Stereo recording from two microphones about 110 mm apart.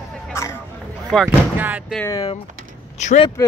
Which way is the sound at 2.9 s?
90° left.